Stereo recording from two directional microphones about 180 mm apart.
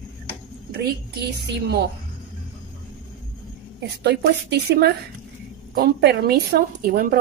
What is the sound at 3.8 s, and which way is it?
A woman's voice, 65° right (ahead or behind).